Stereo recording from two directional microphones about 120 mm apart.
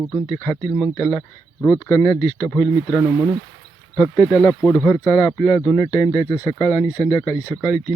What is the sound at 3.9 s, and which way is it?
Speech, 10° left (ahead or behind).